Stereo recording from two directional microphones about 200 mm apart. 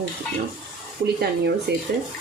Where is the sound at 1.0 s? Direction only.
55° right (ahead or behind).